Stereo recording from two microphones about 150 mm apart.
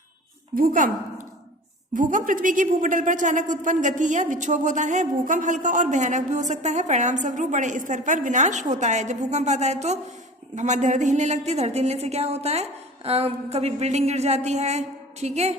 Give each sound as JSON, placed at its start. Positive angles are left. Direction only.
{"t": 0.5, "sound": "a woman's voice", "side_deg": -65}
{"t": 2.0, "sound": "a woman's voice", "side_deg": -60}